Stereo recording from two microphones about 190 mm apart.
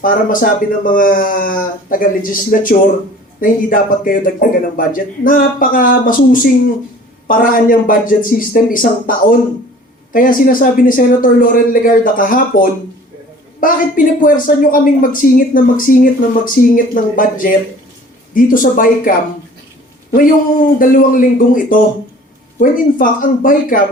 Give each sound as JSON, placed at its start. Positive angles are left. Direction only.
{"t": 0.0, "sound": "speech", "side_deg": 45}
{"t": 20.7, "sound": "speech", "side_deg": 45}